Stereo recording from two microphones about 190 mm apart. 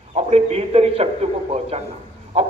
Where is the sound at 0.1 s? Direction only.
30° right (ahead or behind).